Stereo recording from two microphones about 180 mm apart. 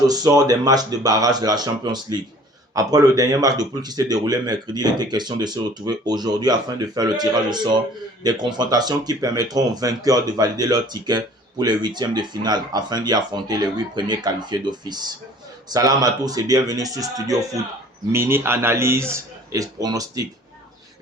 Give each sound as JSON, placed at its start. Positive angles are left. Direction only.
{"t": 0.0, "sound": "a man's voice", "side_deg": -20}